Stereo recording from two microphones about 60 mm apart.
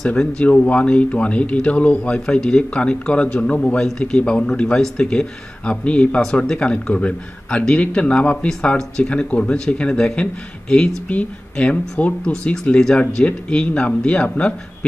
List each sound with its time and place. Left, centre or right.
0.4 s speech: left
8.5 s speech: centre